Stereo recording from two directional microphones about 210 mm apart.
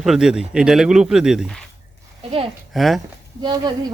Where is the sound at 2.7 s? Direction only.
Centre (ahead or behind).